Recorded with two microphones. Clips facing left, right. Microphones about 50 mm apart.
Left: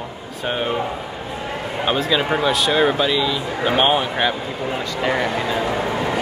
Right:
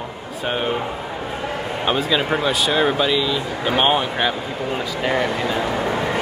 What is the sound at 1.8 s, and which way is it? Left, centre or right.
A man's voice, centre.